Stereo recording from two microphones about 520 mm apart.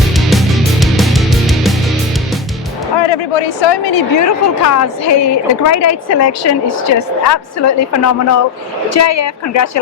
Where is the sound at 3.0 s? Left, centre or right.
Left.